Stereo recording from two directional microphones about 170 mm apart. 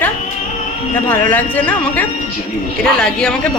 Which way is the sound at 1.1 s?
10° left (ahead or behind).